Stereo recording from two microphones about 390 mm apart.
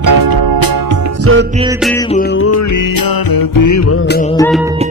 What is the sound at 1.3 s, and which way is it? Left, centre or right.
Music, right.